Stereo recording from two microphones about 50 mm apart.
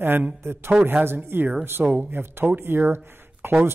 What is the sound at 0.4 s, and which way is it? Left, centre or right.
Speech, right.